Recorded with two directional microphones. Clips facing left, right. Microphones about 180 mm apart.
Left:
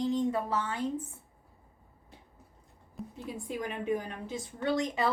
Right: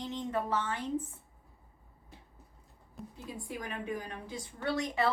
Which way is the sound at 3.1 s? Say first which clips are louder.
Left 4 dB; 20° left (ahead or behind).